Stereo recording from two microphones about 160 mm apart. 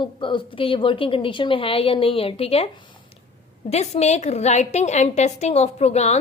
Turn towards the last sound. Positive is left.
turn(degrees=40)  # may be behind; listen again after turning